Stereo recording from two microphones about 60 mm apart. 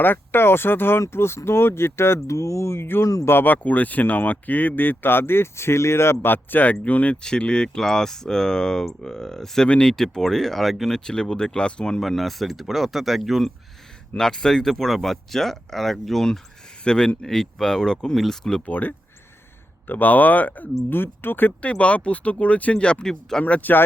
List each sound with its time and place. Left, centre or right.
0.0 s speech: left
6.3 s speech: left
7.2 s speech: centre
14.2 s speech: centre
18.6 s speech: left
21.7 s speech: left
23.4 s speech: left